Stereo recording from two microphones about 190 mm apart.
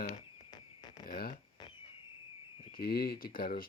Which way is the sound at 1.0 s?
50° left (ahead or behind).